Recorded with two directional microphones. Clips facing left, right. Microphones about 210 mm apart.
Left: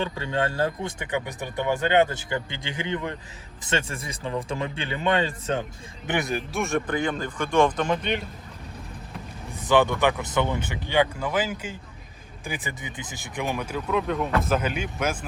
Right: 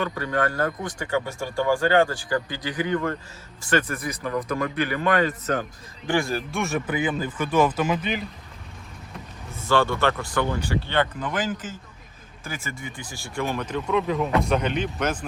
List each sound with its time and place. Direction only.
0.0 s speech: 25° left (ahead or behind)
6.5 s speech: centre (ahead or behind)
9.5 s speech: 15° left (ahead or behind)